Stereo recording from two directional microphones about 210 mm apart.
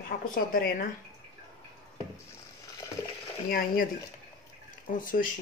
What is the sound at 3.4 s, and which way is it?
Speech, 45° left (ahead or behind).